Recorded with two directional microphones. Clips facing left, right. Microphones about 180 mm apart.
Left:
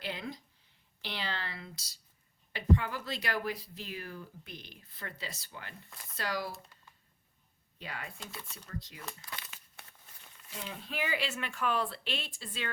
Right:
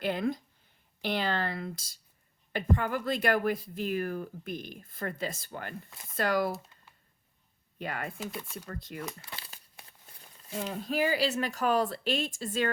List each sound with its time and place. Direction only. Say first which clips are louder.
0.0 s speech: right 10 dB; 50° right (ahead or behind)
7.8 s speech: right 8 dB; 55° right (ahead or behind)
8.3 s speech: right 7 dB; 10° right (ahead or behind)
8.7 s speech: right 1 dB; 55° right (ahead or behind)
9.3 s crumpling: right 1 dB; 30° right (ahead or behind)
10.6 s speech: right 9 dB; 45° right (ahead or behind)